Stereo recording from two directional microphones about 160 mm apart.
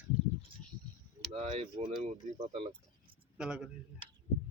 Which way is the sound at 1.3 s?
40° right (ahead or behind).